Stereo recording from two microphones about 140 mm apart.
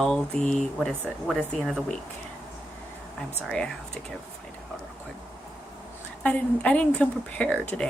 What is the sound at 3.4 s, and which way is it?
Speech, 5° left (ahead or behind).